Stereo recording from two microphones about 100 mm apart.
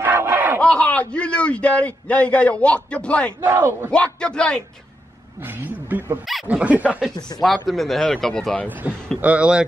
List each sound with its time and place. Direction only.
0.0 s a sound: 20° right (ahead or behind)
0.6 s a man's voice: 15° left (ahead or behind)
3.3 s speech: 20° right (ahead or behind)
3.9 s a man's voice: 10° left (ahead or behind)
5.4 s a woman's voice: 20° right (ahead or behind)
7.3 s speech: centre (ahead or behind)
8.8 s speech: 15° right (ahead or behind)